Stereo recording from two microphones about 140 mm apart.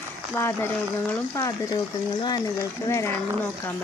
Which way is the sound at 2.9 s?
20° left (ahead or behind).